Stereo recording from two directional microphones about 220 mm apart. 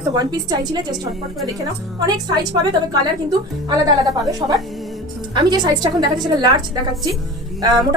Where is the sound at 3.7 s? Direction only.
20° right (ahead or behind).